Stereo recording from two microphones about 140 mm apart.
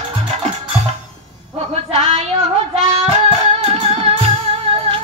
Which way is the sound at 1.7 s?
50° right (ahead or behind).